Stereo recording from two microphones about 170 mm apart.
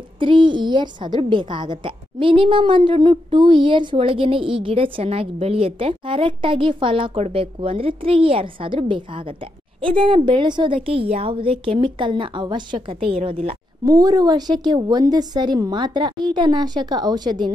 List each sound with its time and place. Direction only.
0.2 s a woman's voice: 30° right (ahead or behind)
13.8 s a woman's voice: 20° right (ahead or behind)